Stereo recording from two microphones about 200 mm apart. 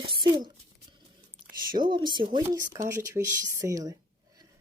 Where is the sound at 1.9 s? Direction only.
20° right (ahead or behind).